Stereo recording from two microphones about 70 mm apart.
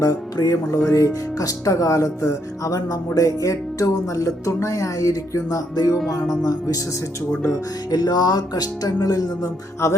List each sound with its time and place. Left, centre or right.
0.0 s speech: left
0.9 s music: left
5.7 s speech: left
7.9 s music: left
9.8 s music: left